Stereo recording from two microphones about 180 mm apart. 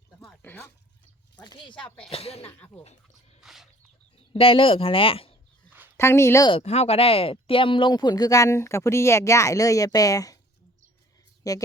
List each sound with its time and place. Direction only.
0.2 s a sound: 5° left (ahead or behind)
1.5 s speech: 25° left (ahead or behind)
3.4 s a sound: centre (ahead or behind)
4.3 s speech: 30° left (ahead or behind)
6.0 s speech: 15° left (ahead or behind)
6.5 s speech: 35° left (ahead or behind); by 10.3 s 20° left (ahead or behind)
11.4 s speech: 20° left (ahead or behind)